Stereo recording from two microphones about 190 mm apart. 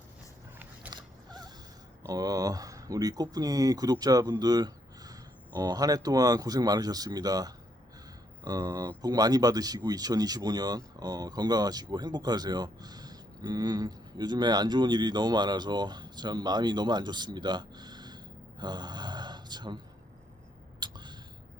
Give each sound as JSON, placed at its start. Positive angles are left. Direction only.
{"t": 0.9, "sound": "mechanisms", "side_deg": -20}
{"t": 2.0, "sound": "speech", "side_deg": -20}
{"t": 18.6, "sound": "a sound", "side_deg": -20}